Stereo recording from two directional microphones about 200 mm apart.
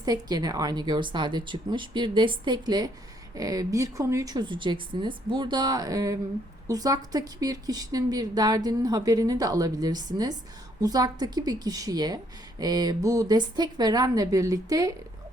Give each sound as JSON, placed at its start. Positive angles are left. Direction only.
{"t": 0.0, "sound": "a woman's voice", "side_deg": -20}